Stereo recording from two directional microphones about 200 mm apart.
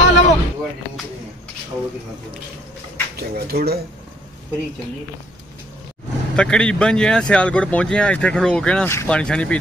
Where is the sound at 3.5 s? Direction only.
50° right (ahead or behind).